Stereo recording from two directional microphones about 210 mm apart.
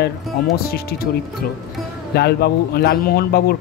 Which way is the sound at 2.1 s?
50° left (ahead or behind).